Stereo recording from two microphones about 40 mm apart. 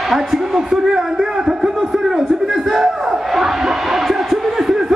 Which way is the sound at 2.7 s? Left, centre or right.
Centre.